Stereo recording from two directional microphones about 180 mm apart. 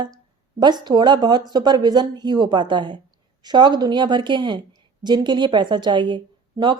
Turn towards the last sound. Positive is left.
turn(degrees=-25)  # may be behind; listen again after turning